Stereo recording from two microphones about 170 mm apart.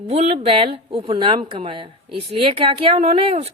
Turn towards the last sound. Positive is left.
turn(degrees=-35)  # may be behind; listen again after turning